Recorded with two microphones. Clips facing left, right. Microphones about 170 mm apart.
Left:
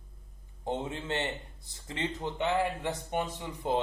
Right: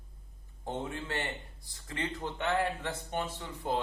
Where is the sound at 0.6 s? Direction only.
20° left (ahead or behind).